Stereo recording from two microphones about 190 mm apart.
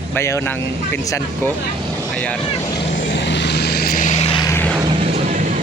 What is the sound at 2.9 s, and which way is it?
Vehicle, 75° left (ahead or behind).